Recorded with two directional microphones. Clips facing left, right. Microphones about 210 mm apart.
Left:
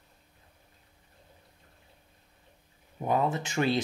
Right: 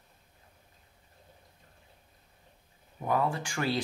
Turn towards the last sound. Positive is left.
turn(degrees=20)  # may be behind; listen again after turning